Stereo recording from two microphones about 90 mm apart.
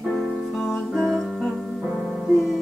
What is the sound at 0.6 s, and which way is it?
Music, centre (ahead or behind).